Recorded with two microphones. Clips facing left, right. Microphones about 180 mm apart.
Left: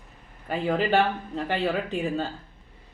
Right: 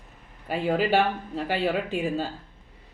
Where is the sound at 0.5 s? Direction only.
10° right (ahead or behind).